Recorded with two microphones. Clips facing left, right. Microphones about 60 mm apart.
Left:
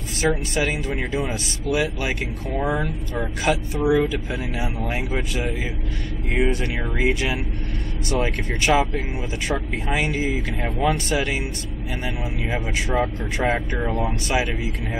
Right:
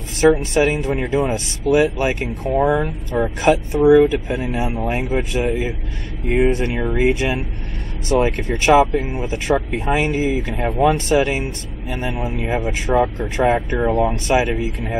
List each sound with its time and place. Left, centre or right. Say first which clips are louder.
0.4 s speech: right 6 dB; right